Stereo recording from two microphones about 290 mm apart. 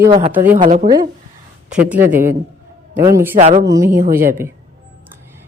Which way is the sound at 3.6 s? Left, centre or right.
Centre.